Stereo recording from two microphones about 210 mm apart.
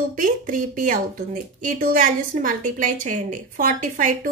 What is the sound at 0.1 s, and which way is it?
Speech, 40° right (ahead or behind).